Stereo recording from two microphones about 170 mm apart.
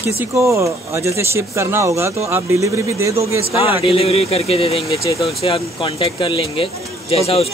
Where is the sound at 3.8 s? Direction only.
35° left (ahead or behind).